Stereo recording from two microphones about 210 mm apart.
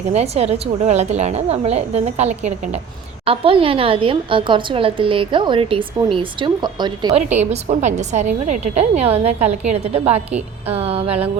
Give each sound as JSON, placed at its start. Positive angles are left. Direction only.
{"t": 0.1, "sound": "a woman's voice", "side_deg": -30}
{"t": 7.2, "sound": "a woman's voice", "side_deg": -35}